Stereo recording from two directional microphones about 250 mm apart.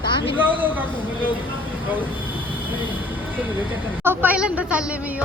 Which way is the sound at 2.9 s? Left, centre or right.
Centre.